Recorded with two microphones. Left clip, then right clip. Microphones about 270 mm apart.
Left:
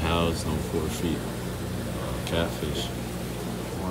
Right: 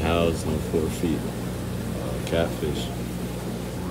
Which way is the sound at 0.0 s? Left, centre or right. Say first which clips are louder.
Right 3 dB; centre.